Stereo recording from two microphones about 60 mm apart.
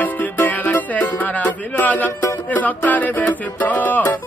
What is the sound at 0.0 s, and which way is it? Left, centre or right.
Music, left.